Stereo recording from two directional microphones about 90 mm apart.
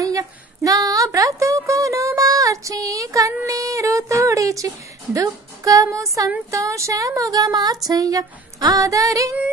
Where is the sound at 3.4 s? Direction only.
40° right (ahead or behind).